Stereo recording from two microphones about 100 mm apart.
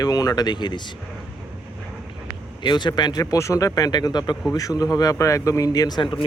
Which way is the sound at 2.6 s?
50° left (ahead or behind).